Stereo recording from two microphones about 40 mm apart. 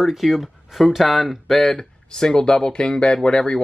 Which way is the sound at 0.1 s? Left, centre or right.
Centre.